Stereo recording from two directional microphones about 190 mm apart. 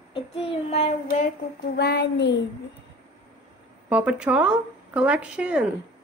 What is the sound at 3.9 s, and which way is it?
Speech, 5° right (ahead or behind).